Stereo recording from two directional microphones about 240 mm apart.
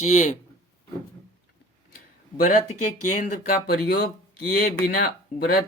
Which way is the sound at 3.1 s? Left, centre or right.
Left.